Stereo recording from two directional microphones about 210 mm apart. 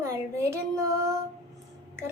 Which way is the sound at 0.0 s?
15° right (ahead or behind).